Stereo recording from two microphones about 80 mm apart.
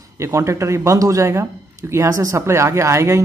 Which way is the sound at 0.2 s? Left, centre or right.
Right.